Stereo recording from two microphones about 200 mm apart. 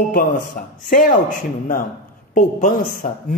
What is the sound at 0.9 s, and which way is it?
Speech, 40° left (ahead or behind).